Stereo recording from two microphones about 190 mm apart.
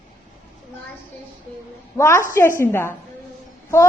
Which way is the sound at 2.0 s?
15° left (ahead or behind).